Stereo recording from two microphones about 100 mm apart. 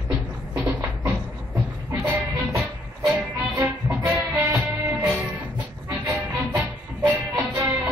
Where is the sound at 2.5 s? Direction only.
30° right (ahead or behind).